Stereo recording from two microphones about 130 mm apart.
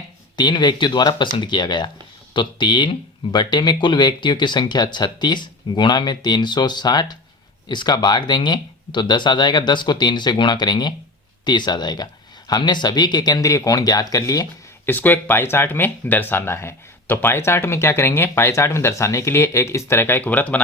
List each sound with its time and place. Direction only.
0.3 s speech: 35° left (ahead or behind)
14.8 s speech: 15° left (ahead or behind)